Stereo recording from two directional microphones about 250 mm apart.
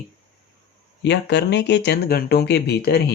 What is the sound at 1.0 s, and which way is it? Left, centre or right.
Speech, left.